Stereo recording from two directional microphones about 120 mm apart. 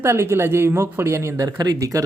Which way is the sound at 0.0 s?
20° right (ahead or behind).